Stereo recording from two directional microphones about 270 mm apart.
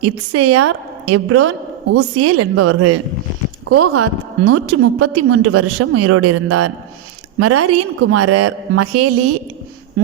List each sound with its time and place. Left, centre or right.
0.0 s a woman's voice: right